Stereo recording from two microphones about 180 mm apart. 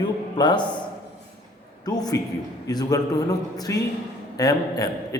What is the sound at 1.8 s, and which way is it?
A man's voice, 20° left (ahead or behind).